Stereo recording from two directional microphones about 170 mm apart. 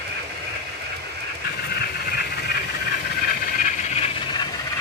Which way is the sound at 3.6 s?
35° left (ahead or behind).